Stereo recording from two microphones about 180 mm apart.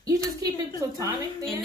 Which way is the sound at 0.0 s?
20° right (ahead or behind).